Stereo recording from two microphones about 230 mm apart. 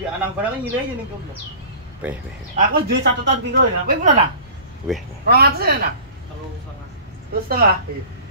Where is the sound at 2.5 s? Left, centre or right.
Right.